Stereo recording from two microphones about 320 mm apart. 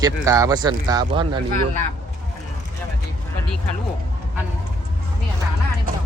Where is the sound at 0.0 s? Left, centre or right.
Centre.